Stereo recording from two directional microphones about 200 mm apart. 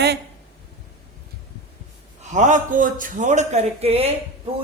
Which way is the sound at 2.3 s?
40° right (ahead or behind).